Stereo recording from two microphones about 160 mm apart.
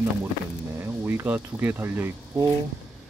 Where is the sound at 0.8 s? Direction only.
15° right (ahead or behind).